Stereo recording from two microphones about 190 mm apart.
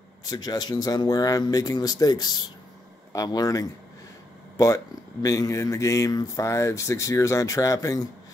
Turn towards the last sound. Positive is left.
turn(degrees=15)  # may be behind; listen again after turning